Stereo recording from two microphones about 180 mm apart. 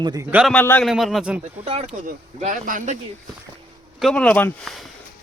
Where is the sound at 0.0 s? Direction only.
20° right (ahead or behind).